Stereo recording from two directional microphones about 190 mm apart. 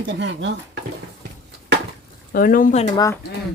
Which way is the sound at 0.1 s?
65° right (ahead or behind).